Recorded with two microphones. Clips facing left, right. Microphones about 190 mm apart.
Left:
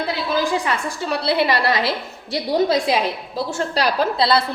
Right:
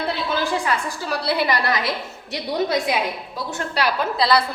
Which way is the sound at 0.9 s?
25° left (ahead or behind).